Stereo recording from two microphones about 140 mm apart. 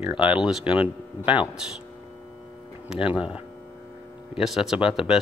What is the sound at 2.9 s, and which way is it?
Speech, 5° right (ahead or behind).